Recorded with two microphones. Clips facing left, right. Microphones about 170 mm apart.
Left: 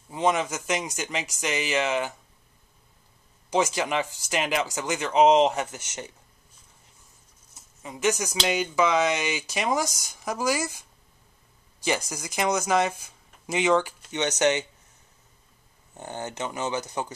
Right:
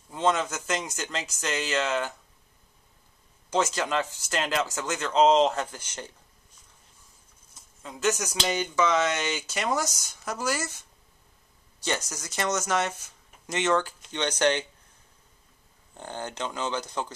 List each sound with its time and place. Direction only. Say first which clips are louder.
0.1 s speech: left 1 dB; 15° left (ahead or behind)
3.4 s speech: left 2 dB; 15° left (ahead or behind)
7.5 s speech: left 2 dB; 15° left (ahead or behind)
11.8 s speech: left 3 dB; 10° left (ahead or behind)
16.0 s speech: left 1 dB; 20° left (ahead or behind)